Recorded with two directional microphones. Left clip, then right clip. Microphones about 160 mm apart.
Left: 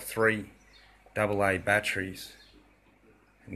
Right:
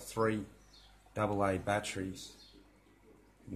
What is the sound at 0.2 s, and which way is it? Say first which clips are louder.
Speech: left 7 dB; 20° left (ahead or behind).